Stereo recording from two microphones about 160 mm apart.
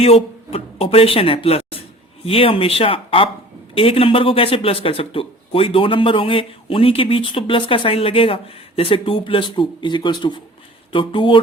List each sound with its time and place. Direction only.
0.0 s speech: 40° left (ahead or behind)